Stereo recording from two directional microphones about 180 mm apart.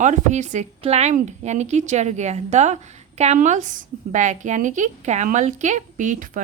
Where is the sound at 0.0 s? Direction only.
40° right (ahead or behind).